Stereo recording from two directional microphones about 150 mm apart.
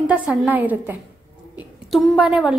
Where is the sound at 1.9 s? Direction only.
Centre (ahead or behind).